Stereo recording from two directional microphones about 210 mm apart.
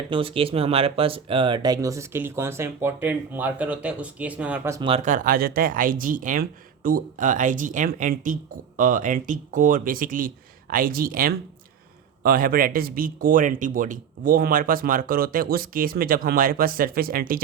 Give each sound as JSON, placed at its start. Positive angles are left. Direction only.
{"t": 0.1, "sound": "speech", "side_deg": -25}
{"t": 4.8, "sound": "speech", "side_deg": -30}